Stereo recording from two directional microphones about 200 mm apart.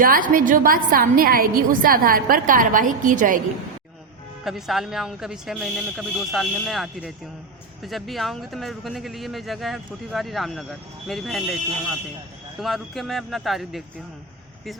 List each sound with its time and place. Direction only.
0.0 s a woman's voice: 45° right (ahead or behind)
4.4 s speech: centre (ahead or behind)
12.5 s speech: centre (ahead or behind)